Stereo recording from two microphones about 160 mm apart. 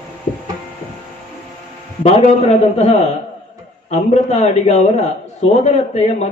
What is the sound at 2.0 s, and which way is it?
Speech, 40° left (ahead or behind).